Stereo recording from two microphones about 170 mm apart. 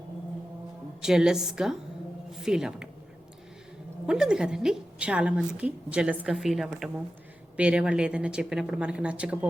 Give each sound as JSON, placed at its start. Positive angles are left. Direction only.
{"t": 1.0, "sound": "a woman's voice", "side_deg": -5}
{"t": 4.0, "sound": "a woman's voice", "side_deg": -5}